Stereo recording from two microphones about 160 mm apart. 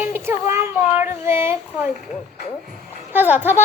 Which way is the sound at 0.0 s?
15° right (ahead or behind).